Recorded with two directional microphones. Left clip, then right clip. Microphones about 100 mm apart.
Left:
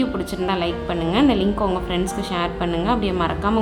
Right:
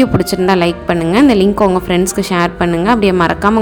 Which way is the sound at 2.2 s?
90° right.